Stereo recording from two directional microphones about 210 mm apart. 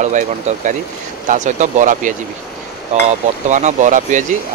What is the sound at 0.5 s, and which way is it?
Speech, 35° right (ahead or behind).